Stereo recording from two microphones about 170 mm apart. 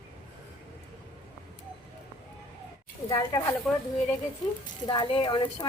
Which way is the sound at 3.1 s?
20° left (ahead or behind).